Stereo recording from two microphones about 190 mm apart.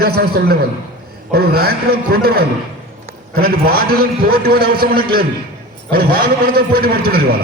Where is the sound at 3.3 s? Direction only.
50° right (ahead or behind).